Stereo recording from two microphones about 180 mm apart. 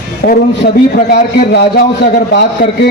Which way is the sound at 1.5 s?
70° left (ahead or behind).